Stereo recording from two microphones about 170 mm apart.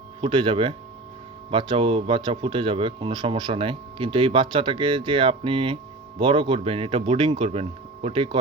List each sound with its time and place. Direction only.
0.2 s speech: 30° right (ahead or behind)